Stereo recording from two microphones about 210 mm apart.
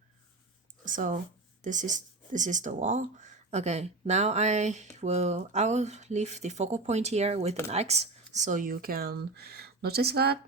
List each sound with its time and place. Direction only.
0.9 s speech: 40° right (ahead or behind)